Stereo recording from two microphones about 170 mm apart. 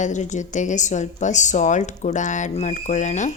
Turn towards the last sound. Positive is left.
turn(degrees=45)  # may be behind; listen again after turning